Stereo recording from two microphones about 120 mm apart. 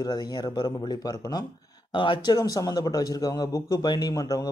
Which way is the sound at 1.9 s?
45° left (ahead or behind).